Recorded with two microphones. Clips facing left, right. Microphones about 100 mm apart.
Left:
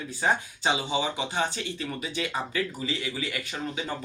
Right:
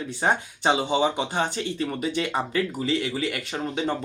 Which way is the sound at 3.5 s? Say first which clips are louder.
Right 6 dB; 35° right (ahead or behind).